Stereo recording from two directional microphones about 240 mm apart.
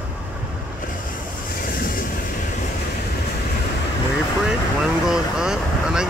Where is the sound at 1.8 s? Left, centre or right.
Left.